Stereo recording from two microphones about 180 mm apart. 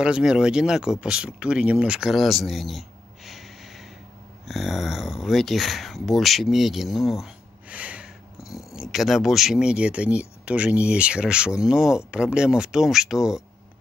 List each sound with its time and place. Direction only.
0.0 s speech: 5° right (ahead or behind)
3.3 s snort: centre (ahead or behind)
4.5 s speech: centre (ahead or behind)